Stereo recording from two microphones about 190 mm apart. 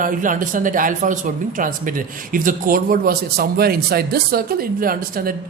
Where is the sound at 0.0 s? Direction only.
45° right (ahead or behind).